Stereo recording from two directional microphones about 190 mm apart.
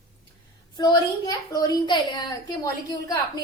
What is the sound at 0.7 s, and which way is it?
A woman's voice, 20° left (ahead or behind).